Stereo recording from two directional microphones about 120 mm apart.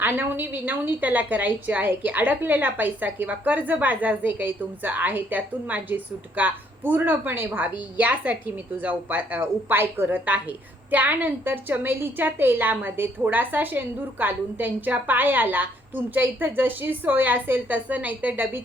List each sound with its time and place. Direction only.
0.0 s a woman's voice: 15° right (ahead or behind)